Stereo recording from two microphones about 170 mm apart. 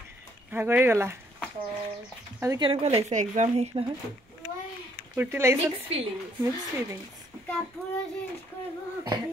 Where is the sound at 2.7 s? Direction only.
35° right (ahead or behind).